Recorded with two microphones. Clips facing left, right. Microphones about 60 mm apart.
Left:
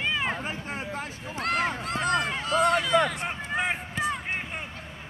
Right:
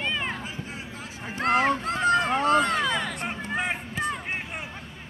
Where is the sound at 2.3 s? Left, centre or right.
Right.